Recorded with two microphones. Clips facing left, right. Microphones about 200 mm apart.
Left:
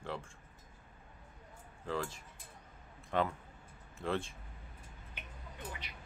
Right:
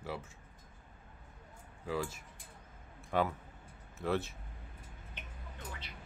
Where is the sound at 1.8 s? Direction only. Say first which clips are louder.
Right 1 dB; 10° right (ahead or behind).